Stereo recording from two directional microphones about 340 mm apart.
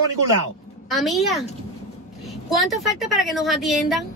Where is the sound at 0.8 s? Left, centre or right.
Centre.